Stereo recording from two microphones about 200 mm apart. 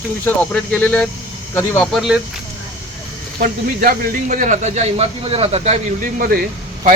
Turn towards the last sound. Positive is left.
turn(degrees=-45)  # may be behind; listen again after turning